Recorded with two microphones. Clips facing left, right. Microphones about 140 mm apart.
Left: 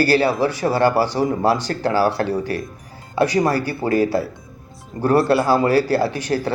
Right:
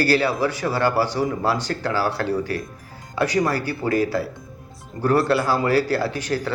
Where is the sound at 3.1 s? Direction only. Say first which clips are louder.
Left 4 dB; 35° left (ahead or behind).